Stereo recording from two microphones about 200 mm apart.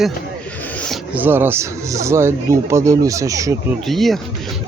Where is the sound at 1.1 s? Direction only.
10° right (ahead or behind).